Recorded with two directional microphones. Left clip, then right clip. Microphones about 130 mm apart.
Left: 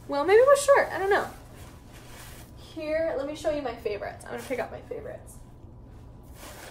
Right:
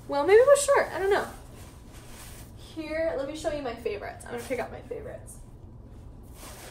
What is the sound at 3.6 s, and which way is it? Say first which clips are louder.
Speech: left 1 dB; 15° left (ahead or behind).